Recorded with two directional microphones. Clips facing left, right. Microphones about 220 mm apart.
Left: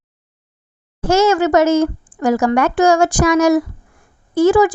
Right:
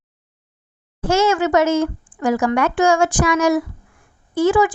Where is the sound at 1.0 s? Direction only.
40° left (ahead or behind).